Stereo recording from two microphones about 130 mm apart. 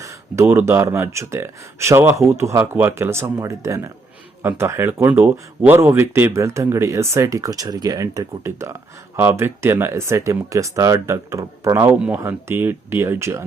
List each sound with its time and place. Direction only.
0.0 s speech: 20° right (ahead or behind)
11.9 s speech: 10° right (ahead or behind)